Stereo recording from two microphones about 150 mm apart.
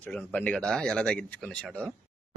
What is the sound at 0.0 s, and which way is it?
Speech, 10° left (ahead or behind).